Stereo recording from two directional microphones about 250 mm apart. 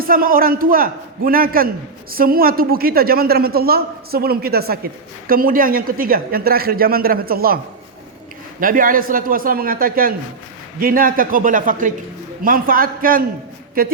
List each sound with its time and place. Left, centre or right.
0.0 s a man's voice: right
8.6 s a man's voice: right